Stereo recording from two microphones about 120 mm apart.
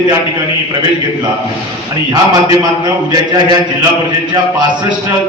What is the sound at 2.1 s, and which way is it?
A man's voice, 35° right (ahead or behind).